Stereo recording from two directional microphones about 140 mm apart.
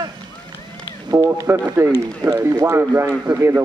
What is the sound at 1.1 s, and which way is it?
Speech, 25° right (ahead or behind).